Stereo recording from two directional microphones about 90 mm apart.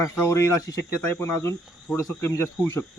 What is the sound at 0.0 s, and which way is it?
Speech, 30° left (ahead or behind).